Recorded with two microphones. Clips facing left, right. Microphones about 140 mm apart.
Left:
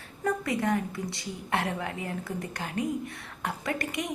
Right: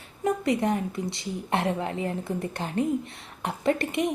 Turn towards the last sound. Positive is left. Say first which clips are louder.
# right 7 dB
turn(degrees=-25)  # may be behind; listen again after turning